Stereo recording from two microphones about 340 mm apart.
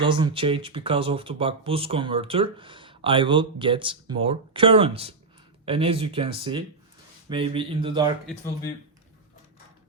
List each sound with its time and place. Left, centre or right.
0.0 s speech: centre